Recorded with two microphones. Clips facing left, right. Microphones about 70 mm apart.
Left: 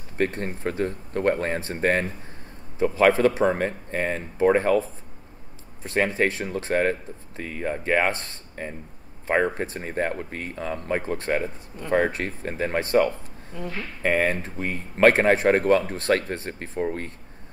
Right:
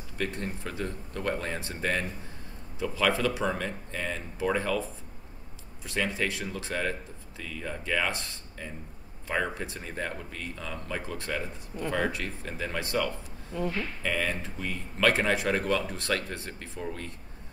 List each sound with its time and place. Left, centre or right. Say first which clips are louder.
0.2 s speech: left 8 dB; left
5.9 s speech: left 7 dB; left